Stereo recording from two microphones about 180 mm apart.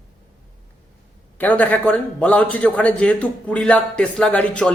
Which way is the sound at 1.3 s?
10° left (ahead or behind).